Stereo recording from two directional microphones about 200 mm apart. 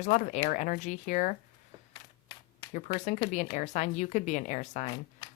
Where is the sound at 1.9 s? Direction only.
20° left (ahead or behind).